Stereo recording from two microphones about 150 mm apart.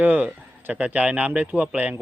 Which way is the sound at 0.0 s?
10° right (ahead or behind).